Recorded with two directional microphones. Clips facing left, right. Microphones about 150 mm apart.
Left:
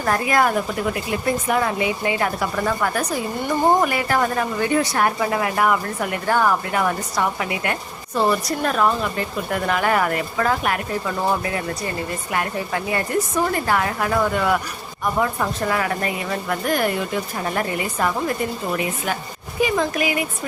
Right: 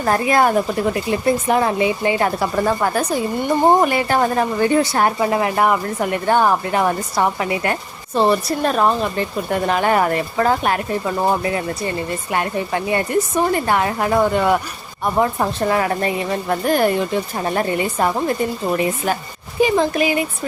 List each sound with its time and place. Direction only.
0.0 s a woman's voice: 30° right (ahead or behind)
12.3 s a woman's voice: 25° right (ahead or behind)
19.6 s a woman's voice: 30° right (ahead or behind)